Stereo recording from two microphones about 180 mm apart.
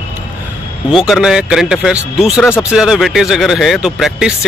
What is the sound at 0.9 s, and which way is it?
Speech, centre (ahead or behind).